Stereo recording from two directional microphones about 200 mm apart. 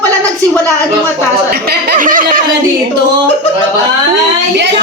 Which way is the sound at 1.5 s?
50° right (ahead or behind).